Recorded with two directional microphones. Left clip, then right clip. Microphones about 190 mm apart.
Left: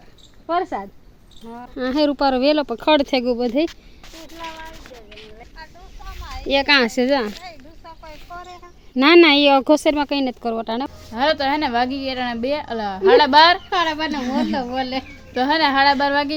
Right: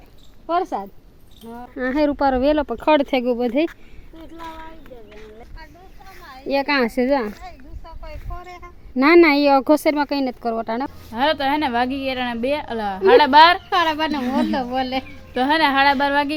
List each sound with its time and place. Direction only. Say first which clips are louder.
0.4 s speech: even; centre (ahead or behind)
1.8 s speech: even; 15° left (ahead or behind)
6.6 s speech: left 3 dB; 5° right (ahead or behind)
7.4 s a sound: left 1 dB; 65° right (ahead or behind)
9.0 s speech: left 1 dB; 10° left (ahead or behind)
10.6 s speech: even; 10° left (ahead or behind)
13.7 s speech: right 1 dB; 10° right (ahead or behind)
15.3 s speech: even; centre (ahead or behind)